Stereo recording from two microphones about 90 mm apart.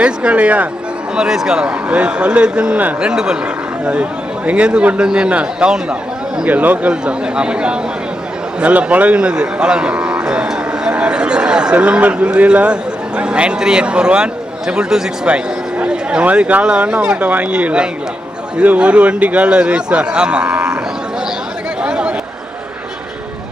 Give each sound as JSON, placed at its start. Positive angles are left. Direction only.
{"t": 0.0, "sound": "a man's voice", "side_deg": -10}
{"t": 4.4, "sound": "a man's voice", "side_deg": -15}
{"t": 21.8, "sound": "chatter", "side_deg": -10}